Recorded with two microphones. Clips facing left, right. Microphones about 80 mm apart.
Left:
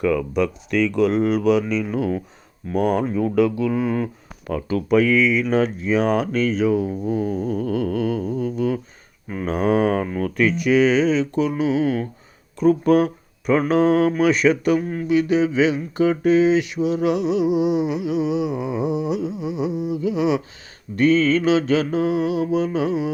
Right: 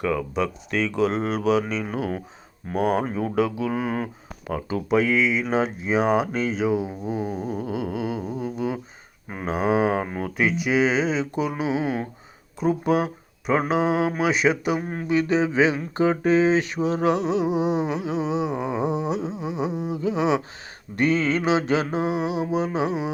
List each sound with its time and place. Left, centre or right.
0.2 s speech: centre
1.0 s mantra: right
3.2 s mantra: centre
4.4 s speech: centre
11.4 s mantra: right
12.5 s speech: centre
14.8 s mantra: right